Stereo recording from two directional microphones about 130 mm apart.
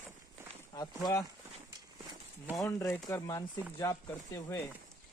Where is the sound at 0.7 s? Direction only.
30° left (ahead or behind).